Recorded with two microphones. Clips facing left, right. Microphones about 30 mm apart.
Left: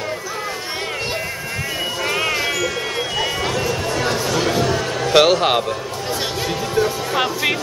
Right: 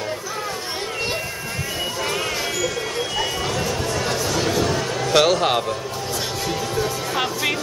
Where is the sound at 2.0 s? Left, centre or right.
Centre.